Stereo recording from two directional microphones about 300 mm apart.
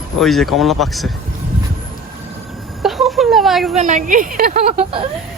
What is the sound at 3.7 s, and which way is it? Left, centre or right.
Speech, right.